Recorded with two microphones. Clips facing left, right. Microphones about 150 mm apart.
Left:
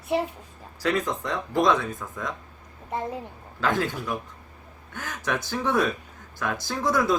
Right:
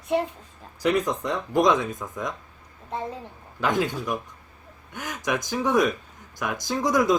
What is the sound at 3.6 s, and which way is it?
Speech, 15° right (ahead or behind).